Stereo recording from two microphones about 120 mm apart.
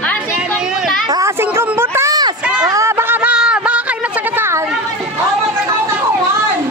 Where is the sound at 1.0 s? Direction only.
35° right (ahead or behind).